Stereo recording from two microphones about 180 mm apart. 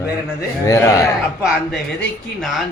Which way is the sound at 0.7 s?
15° left (ahead or behind).